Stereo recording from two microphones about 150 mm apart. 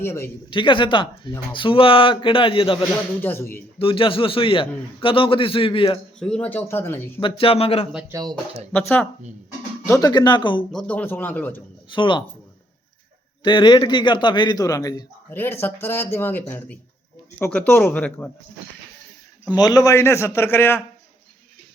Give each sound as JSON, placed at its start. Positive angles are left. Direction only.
{"t": 0.0, "sound": "a man's voice", "side_deg": 20}
{"t": 0.5, "sound": "a man's voice", "side_deg": 35}
{"t": 3.2, "sound": "a man's voice", "side_deg": 15}
{"t": 3.8, "sound": "a man's voice", "side_deg": 35}
{"t": 6.1, "sound": "a man's voice", "side_deg": 5}
{"t": 7.2, "sound": "a man's voice", "side_deg": 35}
{"t": 8.0, "sound": "speech", "side_deg": -25}
{"t": 8.7, "sound": "a man's voice", "side_deg": 10}
{"t": 9.8, "sound": "speech", "side_deg": 20}
{"t": 10.7, "sound": "a man's voice", "side_deg": 5}
{"t": 11.9, "sound": "a man's voice", "side_deg": 30}
{"t": 13.4, "sound": "a man's voice", "side_deg": 30}
{"t": 19.5, "sound": "a man's voice", "side_deg": 25}